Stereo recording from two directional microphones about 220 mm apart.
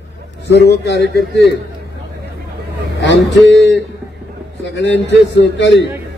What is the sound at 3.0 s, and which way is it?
A man's voice, 55° left (ahead or behind).